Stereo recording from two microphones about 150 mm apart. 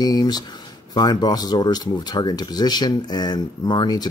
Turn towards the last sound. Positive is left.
turn(degrees=30)  # may be behind; listen again after turning